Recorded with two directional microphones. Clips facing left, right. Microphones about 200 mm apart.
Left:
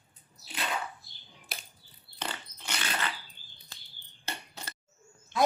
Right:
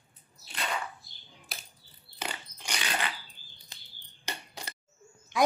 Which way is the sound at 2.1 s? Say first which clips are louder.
Even; 10° right (ahead or behind).